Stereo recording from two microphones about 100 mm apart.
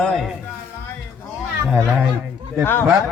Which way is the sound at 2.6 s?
20° left (ahead or behind).